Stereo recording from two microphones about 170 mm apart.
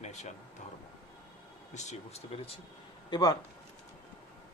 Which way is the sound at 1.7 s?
40° left (ahead or behind).